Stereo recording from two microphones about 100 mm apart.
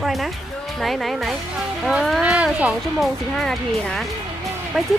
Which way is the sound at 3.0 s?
5° left (ahead or behind).